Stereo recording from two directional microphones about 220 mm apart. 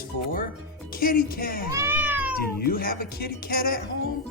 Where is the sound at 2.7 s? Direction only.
40° left (ahead or behind).